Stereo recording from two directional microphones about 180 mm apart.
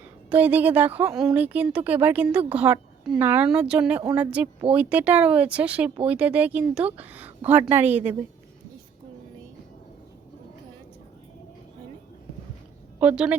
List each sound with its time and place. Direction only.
0.3 s a woman's voice: 10° right (ahead or behind)
13.0 s a woman's voice: 5° right (ahead or behind)